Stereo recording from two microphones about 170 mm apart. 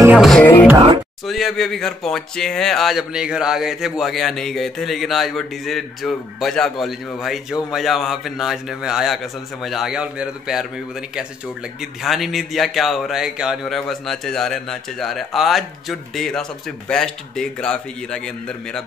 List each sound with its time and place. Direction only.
0.2 s speech: centre (ahead or behind)
0.7 s speech: 25° right (ahead or behind)
1.2 s speech: centre (ahead or behind)